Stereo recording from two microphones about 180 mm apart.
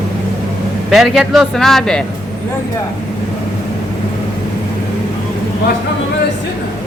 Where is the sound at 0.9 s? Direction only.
Centre (ahead or behind).